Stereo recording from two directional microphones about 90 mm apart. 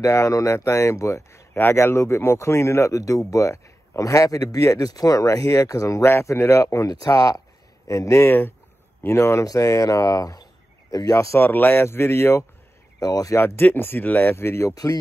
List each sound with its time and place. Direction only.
0.0 s speech: 35° left (ahead or behind)
11.3 s speech: 20° left (ahead or behind)
13.0 s speech: 40° left (ahead or behind)
13.6 s speech: 25° left (ahead or behind)
14.7 s speech: 40° left (ahead or behind)